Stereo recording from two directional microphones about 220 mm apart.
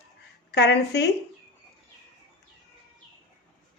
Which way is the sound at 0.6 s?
50° left (ahead or behind).